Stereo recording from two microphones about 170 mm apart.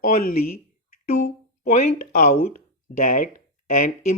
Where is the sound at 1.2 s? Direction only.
45° left (ahead or behind).